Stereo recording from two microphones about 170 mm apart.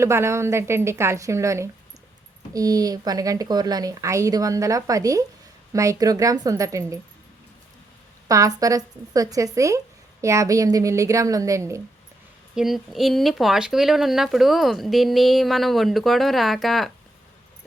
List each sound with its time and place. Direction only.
0.0 s a woman's voice: 15° right (ahead or behind)
8.3 s speech: 20° right (ahead or behind)
12.5 s speech: centre (ahead or behind)